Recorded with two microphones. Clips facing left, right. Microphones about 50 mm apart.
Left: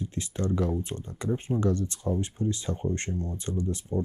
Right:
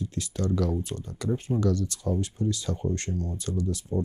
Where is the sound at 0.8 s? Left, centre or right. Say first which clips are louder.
Right 1 dB; left.